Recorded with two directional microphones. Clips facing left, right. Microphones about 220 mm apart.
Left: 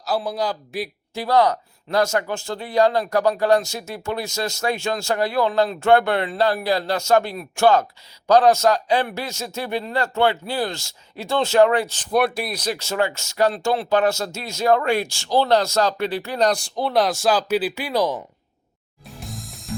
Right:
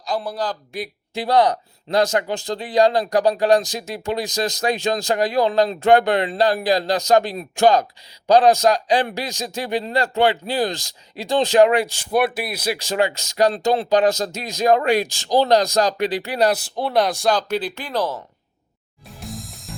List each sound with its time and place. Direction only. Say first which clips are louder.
0.0 s a man's voice: left 1 dB; 5° left (ahead or behind)
1.1 s speech: right 1 dB; 15° right (ahead or behind); by 18.2 s 10° left (ahead or behind)
19.0 s music: right 2 dB; centre (ahead or behind)